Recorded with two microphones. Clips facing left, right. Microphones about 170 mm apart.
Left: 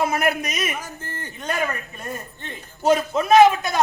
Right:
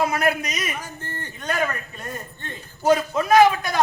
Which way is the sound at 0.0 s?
25° left (ahead or behind).